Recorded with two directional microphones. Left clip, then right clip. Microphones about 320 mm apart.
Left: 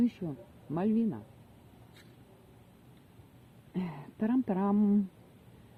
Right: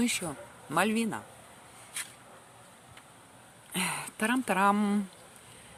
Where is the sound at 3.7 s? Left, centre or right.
Right.